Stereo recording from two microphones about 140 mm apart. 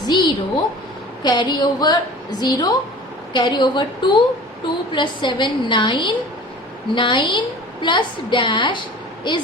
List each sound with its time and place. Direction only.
0.1 s a woman's voice: 30° left (ahead or behind)